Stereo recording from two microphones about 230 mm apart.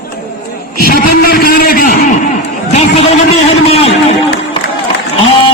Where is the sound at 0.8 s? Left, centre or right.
Left.